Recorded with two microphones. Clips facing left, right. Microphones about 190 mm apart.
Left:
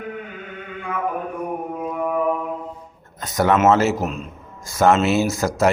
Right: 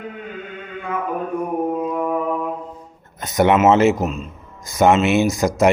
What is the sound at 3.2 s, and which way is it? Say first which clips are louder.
Speech: right 3 dB; 20° right (ahead or behind).